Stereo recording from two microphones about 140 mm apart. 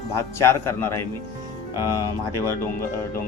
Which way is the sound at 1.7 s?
20° right (ahead or behind).